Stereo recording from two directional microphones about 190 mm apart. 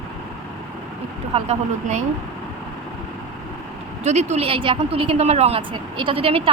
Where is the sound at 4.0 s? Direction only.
35° right (ahead or behind).